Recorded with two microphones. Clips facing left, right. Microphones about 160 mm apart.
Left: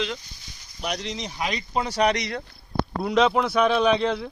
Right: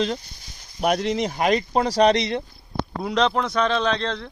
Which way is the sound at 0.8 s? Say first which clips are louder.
Right 9 dB; 55° right (ahead or behind).